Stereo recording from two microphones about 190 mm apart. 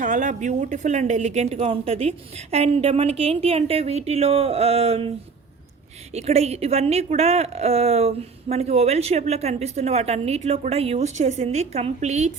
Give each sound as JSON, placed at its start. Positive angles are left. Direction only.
{"t": 0.0, "sound": "a woman's voice", "side_deg": -40}
{"t": 6.1, "sound": "a woman's voice", "side_deg": -35}